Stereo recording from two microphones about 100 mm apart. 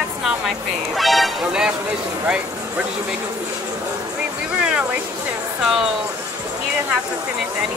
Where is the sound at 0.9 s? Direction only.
Centre (ahead or behind).